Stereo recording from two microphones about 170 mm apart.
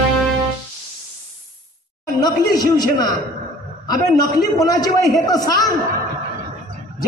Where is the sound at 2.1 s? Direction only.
25° left (ahead or behind).